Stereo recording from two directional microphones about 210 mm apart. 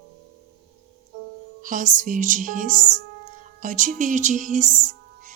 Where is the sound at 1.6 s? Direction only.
40° right (ahead or behind).